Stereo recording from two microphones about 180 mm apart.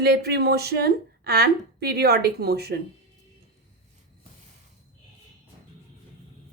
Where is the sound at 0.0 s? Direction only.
60° right (ahead or behind).